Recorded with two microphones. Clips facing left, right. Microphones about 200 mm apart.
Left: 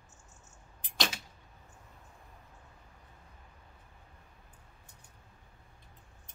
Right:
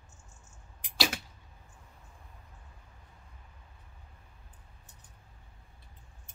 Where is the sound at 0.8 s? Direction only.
10° right (ahead or behind).